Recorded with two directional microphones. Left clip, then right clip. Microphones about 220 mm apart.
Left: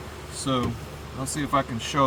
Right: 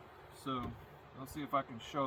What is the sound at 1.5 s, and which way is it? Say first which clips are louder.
Speech: left 11 dB; 30° left (ahead or behind).